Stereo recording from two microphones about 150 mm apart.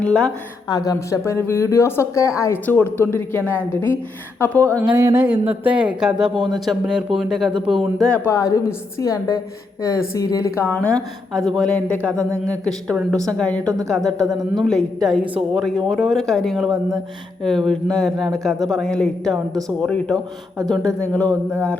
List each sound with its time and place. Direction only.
0.0 s a woman's voice: 5° left (ahead or behind)
0.7 s a woman's voice: 25° left (ahead or behind)
4.9 s speech: 15° right (ahead or behind); by 8.2 s 5° left (ahead or behind)
8.2 s a woman's voice: 20° left (ahead or behind); by 13.6 s 5° left (ahead or behind)
13.7 s a woman's voice: 25° right (ahead or behind)
14.5 s a woman's voice: centre (ahead or behind)